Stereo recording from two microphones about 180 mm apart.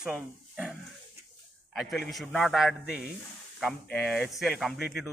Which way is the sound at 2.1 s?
Centre (ahead or behind).